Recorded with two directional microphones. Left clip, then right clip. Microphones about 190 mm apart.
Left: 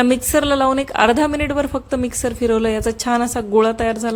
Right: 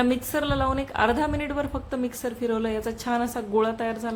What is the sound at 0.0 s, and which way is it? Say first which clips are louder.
A woman's voice: left 9 dB; 35° left (ahead or behind).